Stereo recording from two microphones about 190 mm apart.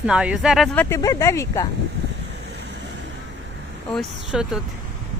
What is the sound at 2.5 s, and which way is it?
Vehicle, 60° right (ahead or behind).